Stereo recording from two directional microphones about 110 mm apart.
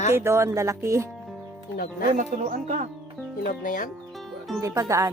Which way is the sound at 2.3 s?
90° right.